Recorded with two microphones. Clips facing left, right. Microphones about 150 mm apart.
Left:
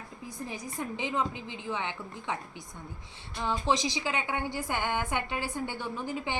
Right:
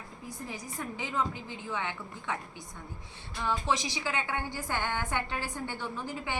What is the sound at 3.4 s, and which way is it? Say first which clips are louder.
A woman's voice: left 2 dB; 20° left (ahead or behind).